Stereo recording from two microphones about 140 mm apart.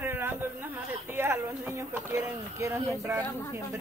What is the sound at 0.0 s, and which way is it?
Speech, 15° right (ahead or behind).